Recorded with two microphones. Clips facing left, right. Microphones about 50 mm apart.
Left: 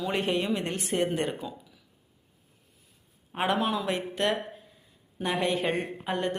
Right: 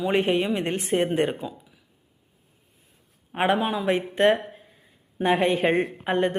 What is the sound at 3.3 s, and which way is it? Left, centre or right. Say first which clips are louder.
A woman's voice: right 4 dB; right.